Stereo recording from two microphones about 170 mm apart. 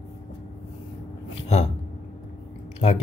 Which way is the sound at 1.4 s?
40° left (ahead or behind).